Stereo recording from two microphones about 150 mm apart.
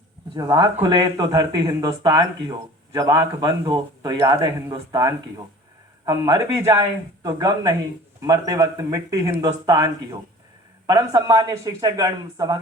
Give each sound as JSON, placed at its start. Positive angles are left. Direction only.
{"t": 0.3, "sound": "speech", "side_deg": -25}